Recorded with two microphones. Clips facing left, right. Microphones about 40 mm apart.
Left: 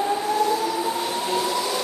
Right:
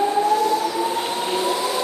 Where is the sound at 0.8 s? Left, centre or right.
Right.